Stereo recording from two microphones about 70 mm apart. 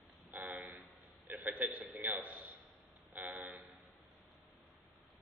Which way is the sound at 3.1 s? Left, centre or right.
Right.